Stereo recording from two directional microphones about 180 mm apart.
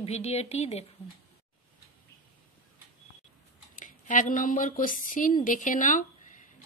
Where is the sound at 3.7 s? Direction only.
45° left (ahead or behind).